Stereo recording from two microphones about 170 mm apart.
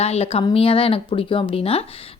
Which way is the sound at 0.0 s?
35° left (ahead or behind).